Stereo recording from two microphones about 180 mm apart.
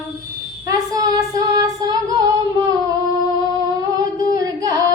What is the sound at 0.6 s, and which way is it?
Child singing, 20° right (ahead or behind).